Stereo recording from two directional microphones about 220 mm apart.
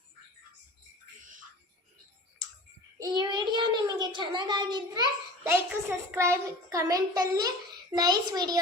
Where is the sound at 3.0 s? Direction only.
20° right (ahead or behind).